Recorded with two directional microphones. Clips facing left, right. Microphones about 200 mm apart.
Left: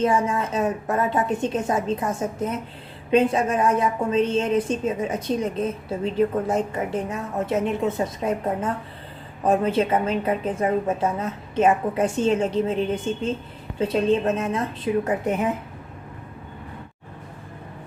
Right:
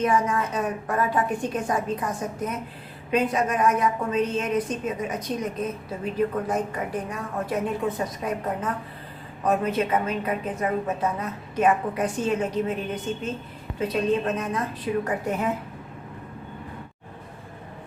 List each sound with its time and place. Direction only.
0.0 s a woman's voice: 25° left (ahead or behind)